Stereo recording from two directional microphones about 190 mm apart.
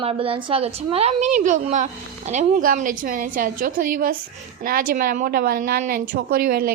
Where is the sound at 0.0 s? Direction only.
30° right (ahead or behind).